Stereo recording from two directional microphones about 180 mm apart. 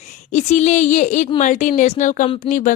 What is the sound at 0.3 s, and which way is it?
A woman's voice, 40° left (ahead or behind).